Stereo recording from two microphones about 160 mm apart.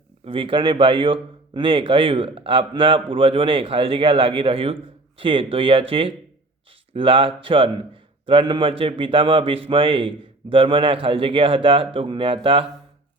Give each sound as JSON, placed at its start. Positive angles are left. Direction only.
{"t": 0.3, "sound": "a man's voice", "side_deg": -35}